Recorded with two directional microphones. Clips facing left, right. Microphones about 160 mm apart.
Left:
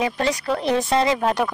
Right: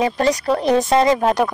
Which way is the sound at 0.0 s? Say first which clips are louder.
Right 5 dB; 40° right (ahead or behind).